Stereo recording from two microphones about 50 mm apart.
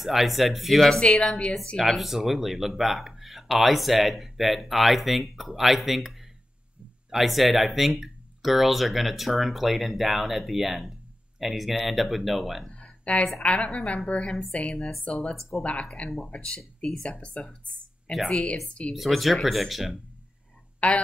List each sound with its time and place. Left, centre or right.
0.0 s speech: centre
12.6 s a sound: left
13.4 s a woman's voice: left
18.9 s speech: centre
20.8 s a woman's voice: left